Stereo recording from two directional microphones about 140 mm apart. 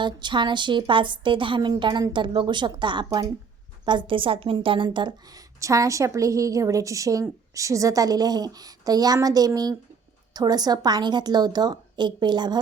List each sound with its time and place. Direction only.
0.0 s a woman's voice: 35° right (ahead or behind)
5.5 s a woman's voice: 25° right (ahead or behind)